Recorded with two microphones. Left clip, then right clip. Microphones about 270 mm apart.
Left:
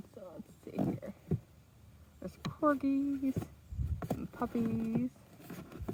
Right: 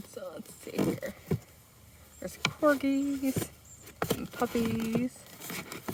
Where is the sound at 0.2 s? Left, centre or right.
Centre.